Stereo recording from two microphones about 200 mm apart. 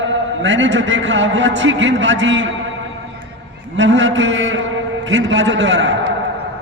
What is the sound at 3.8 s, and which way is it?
A man's voice, 65° right (ahead or behind).